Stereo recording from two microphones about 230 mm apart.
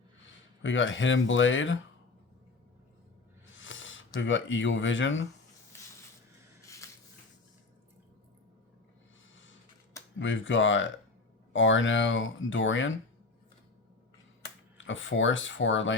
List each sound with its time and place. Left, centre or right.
0.6 s speech: left
3.6 s speech: left
6.7 s squish: centre
9.3 s a sound: left
10.2 s speech: left
14.8 s speech: left